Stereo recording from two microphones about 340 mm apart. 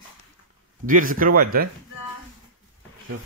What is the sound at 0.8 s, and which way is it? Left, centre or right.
Speech, right.